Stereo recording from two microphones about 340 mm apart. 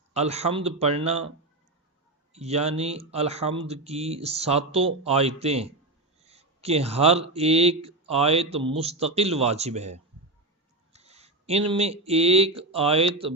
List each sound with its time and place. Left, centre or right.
0.1 s speech: centre
2.3 s speech: centre